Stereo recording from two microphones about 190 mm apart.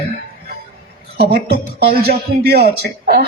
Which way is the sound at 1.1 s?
55° right (ahead or behind).